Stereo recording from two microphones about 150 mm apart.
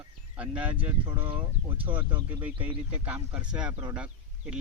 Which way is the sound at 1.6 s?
35° right (ahead or behind).